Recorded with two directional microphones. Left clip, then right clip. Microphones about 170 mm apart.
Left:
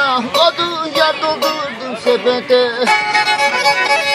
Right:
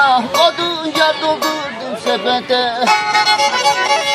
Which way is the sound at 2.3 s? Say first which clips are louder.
Left 2 dB; 35° right (ahead or behind).